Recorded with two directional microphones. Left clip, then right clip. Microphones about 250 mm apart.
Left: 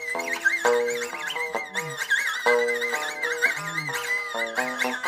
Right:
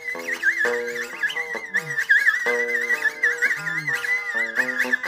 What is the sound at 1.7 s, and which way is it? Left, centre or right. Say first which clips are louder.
Music: right 8 dB; centre.